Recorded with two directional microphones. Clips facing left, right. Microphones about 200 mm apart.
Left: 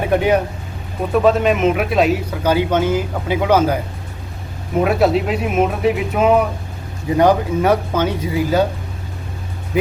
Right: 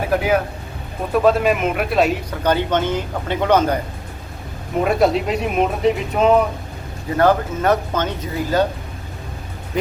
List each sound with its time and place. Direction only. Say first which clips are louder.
0.0 s speech: left 3 dB; centre (ahead or behind)
4.8 s speech: left 1 dB; 5° left (ahead or behind)